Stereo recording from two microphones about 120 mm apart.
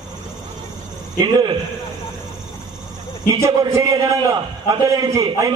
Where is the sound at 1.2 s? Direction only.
30° right (ahead or behind).